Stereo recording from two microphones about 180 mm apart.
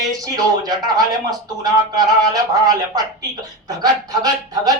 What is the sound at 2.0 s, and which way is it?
A man's voice, 20° right (ahead or behind).